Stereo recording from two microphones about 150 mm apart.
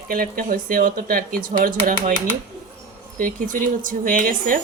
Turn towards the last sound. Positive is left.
turn(degrees=-65)  # may be behind; listen again after turning